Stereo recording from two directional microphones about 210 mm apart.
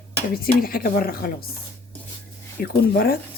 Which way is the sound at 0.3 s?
45° left (ahead or behind).